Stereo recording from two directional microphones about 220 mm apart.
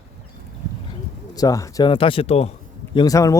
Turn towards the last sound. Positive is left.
turn(degrees=15)  # may be behind; listen again after turning